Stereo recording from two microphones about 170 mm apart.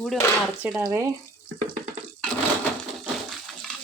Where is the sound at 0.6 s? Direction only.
10° right (ahead or behind).